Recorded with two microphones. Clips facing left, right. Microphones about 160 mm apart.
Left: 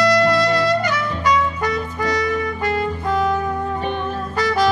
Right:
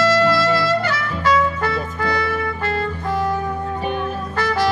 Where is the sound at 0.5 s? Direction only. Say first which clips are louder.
Left 1 dB; 15° left (ahead or behind).